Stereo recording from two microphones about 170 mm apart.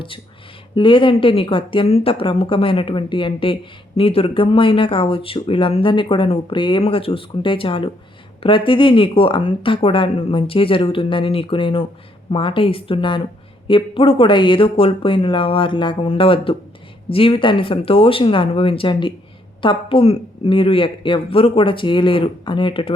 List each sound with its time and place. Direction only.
0.8 s a woman's voice: 30° left (ahead or behind)